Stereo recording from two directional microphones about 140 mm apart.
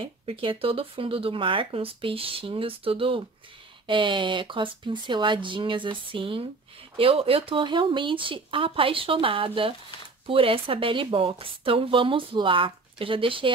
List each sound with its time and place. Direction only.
0.0 s a woman's voice: 40° right (ahead or behind)